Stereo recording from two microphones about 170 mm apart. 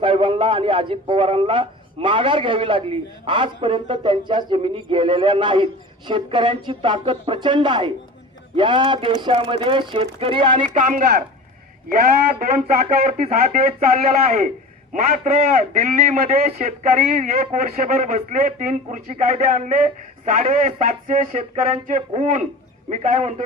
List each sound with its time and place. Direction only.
0.0 s a man's voice: 30° right (ahead or behind)
10.8 s speech: 50° right (ahead or behind)